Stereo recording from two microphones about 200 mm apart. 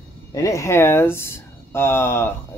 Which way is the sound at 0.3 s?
15° left (ahead or behind).